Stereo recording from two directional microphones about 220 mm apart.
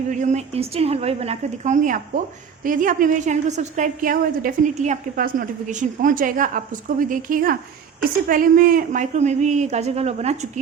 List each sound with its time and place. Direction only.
0.1 s a woman's voice: 35° right (ahead or behind)